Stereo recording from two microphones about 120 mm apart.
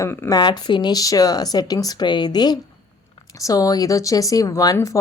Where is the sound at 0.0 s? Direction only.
25° left (ahead or behind).